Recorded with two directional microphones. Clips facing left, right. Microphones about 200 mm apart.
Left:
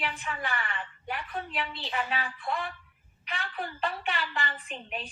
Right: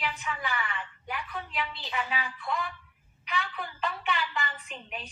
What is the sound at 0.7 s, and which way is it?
A woman's voice, 30° left (ahead or behind).